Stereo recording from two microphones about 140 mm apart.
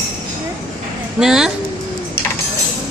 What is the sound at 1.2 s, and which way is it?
Speech, 5° right (ahead or behind).